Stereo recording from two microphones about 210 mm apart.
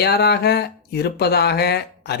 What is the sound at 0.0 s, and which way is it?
Speech, 50° left (ahead or behind).